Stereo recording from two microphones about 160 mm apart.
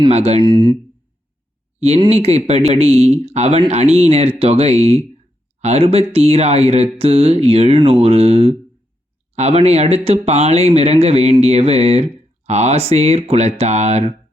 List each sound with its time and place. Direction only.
0.1 s speech: 40° right (ahead or behind)
2.0 s speech: 40° right (ahead or behind)